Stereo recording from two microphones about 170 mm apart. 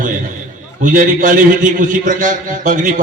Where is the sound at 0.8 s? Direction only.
50° right (ahead or behind).